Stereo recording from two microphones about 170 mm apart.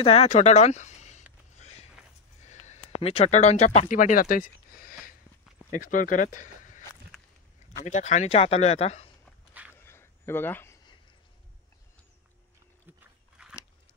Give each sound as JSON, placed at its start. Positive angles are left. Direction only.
{"t": 0.0, "sound": "speech", "side_deg": 40}
{"t": 1.6, "sound": "walk", "side_deg": 40}
{"t": 2.4, "sound": "speech", "side_deg": 40}
{"t": 7.8, "sound": "speech", "side_deg": 40}
{"t": 9.8, "sound": "a sound", "side_deg": 15}
{"t": 13.4, "sound": "biting", "side_deg": -5}